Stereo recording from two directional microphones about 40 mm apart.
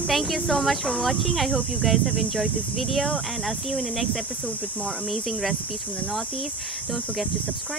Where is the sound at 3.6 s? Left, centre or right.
Centre.